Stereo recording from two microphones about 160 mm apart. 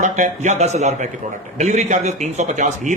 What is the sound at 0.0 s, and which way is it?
A man's voice, 50° right (ahead or behind).